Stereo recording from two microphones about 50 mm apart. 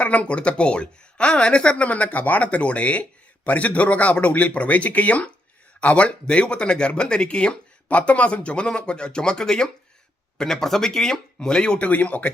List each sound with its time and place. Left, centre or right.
0.0 s speech: left
11.9 s speech: left